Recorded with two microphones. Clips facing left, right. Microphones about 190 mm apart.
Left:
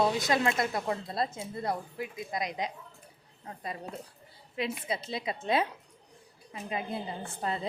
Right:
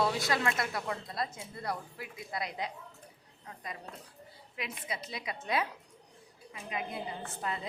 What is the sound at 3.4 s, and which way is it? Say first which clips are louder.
A woman's voice: left 5 dB; 30° left (ahead or behind).